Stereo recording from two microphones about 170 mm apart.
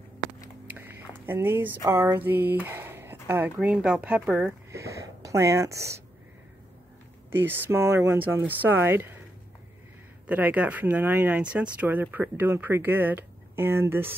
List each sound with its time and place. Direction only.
0.7 s speech: 10° right (ahead or behind)
7.2 s speech: 10° right (ahead or behind)
10.2 s speech: 10° right (ahead or behind)